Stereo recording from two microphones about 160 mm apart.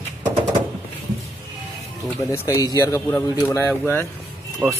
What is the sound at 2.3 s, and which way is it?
Speech, 20° left (ahead or behind).